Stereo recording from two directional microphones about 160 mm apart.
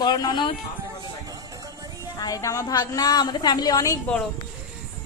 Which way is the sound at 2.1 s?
20° left (ahead or behind).